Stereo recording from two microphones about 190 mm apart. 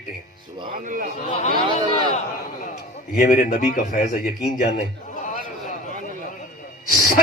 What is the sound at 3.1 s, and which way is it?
A man's voice, 45° left (ahead or behind).